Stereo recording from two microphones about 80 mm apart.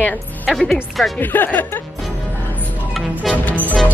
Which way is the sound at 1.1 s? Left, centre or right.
Left.